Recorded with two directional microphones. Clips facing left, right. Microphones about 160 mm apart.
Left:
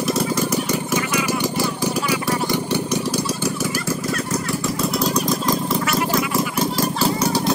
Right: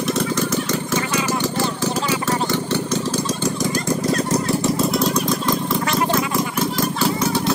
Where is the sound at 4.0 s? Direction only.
35° right (ahead or behind).